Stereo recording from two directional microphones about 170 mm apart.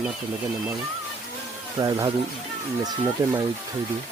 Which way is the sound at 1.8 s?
25° right (ahead or behind).